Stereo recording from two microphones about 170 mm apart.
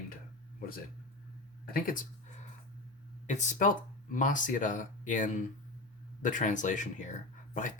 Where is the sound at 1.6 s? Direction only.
55° left (ahead or behind).